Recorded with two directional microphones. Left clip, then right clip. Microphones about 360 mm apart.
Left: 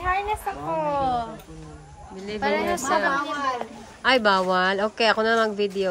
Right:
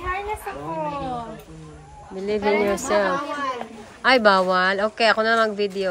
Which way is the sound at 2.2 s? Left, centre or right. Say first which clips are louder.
Right 4 dB; centre.